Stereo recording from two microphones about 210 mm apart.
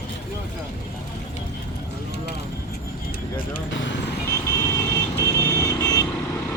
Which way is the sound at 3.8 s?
60° left (ahead or behind).